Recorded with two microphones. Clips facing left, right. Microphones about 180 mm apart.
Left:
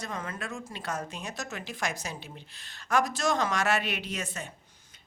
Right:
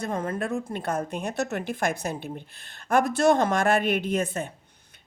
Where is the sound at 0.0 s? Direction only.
55° right (ahead or behind).